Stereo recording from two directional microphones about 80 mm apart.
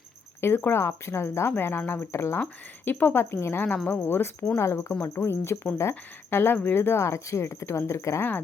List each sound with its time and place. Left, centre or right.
0.4 s speech: left
2.4 s speech: left